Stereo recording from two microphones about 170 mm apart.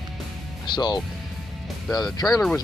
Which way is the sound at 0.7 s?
25° left (ahead or behind).